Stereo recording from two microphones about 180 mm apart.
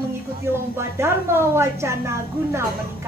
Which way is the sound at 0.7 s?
15° right (ahead or behind).